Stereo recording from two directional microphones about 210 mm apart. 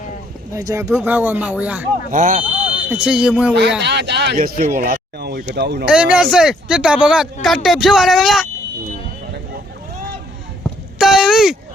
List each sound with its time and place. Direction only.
0.5 s speech: 15° right (ahead or behind)
2.0 s speech: 40° right (ahead or behind)
2.9 s speech: 5° right (ahead or behind)
3.8 s speech: 55° right (ahead or behind)
5.8 s speech: 5° right (ahead or behind)
10.9 s speech: centre (ahead or behind)